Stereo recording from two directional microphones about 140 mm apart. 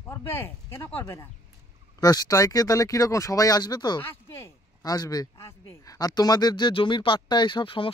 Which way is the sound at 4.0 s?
15° left (ahead or behind).